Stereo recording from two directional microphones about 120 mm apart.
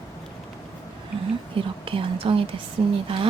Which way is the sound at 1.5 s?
45° right (ahead or behind).